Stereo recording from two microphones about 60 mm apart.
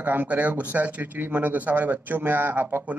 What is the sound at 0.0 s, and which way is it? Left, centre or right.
A man's voice, right.